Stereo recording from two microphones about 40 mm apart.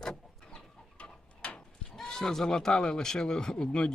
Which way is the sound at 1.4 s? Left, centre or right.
Left.